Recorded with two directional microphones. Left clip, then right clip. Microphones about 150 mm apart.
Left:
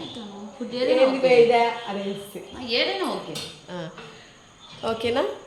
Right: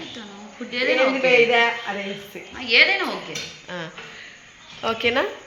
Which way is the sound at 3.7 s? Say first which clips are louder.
Right 3 dB; 10° right (ahead or behind).